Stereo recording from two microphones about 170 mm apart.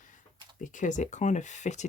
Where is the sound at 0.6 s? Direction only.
50° left (ahead or behind).